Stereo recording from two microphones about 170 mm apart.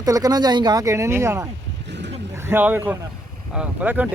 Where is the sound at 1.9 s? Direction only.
90° right.